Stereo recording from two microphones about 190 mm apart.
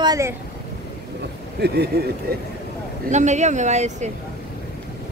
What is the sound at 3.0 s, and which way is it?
Speech, 40° right (ahead or behind).